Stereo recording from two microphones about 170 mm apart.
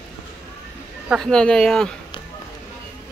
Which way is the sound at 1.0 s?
Centre (ahead or behind).